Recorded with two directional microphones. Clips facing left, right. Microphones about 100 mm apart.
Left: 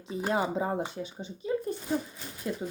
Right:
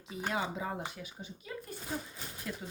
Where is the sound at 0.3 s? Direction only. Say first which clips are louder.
Left 7 dB; 40° left (ahead or behind).